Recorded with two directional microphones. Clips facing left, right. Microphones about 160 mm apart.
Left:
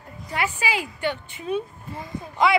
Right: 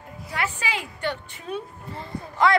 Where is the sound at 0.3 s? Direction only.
10° left (ahead or behind).